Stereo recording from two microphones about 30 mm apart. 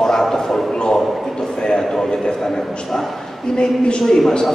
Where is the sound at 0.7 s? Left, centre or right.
Left.